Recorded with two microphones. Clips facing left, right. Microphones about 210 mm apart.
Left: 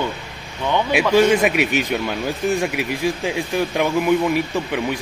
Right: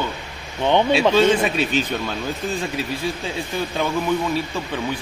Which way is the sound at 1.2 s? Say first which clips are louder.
Left 2 dB; 15° left (ahead or behind).